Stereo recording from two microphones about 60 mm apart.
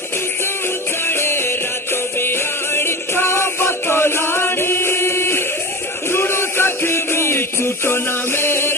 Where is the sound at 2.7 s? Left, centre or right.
Left.